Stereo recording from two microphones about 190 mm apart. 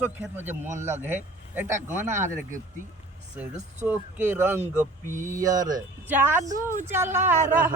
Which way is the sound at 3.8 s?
10° right (ahead or behind).